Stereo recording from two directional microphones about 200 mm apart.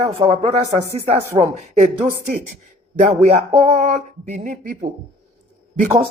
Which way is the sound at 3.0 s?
35° right (ahead or behind).